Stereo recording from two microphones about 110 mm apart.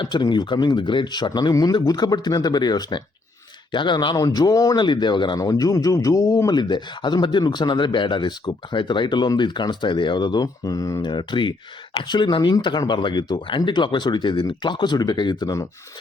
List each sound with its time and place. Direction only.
0.0 s speech: 40° left (ahead or behind)
11.0 s speech: 45° left (ahead or behind)